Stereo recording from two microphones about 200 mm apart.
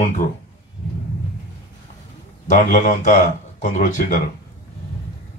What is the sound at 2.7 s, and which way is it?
Speech, 40° left (ahead or behind).